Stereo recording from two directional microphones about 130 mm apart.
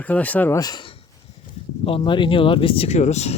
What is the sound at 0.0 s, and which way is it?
Speech, 10° left (ahead or behind).